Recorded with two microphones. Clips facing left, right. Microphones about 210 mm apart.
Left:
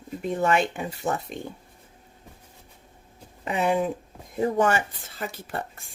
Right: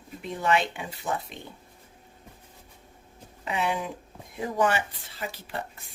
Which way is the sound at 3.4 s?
40° left (ahead or behind).